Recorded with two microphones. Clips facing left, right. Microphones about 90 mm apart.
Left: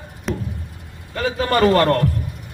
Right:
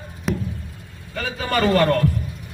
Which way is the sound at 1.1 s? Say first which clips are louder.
Left 4 dB; 60° left (ahead or behind).